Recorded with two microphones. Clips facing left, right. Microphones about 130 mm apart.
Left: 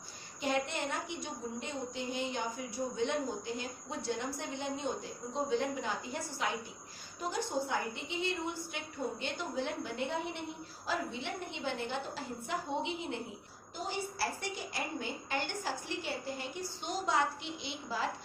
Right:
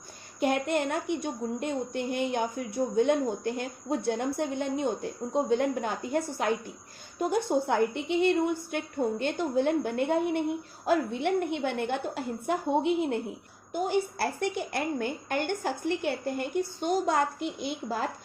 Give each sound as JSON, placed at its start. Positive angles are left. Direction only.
{"t": 0.3, "sound": "a woman's voice", "side_deg": -60}